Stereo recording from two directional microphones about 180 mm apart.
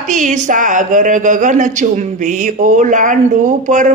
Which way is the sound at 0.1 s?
45° right (ahead or behind).